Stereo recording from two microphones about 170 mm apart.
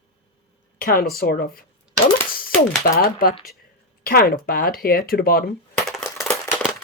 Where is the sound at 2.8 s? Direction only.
55° left (ahead or behind).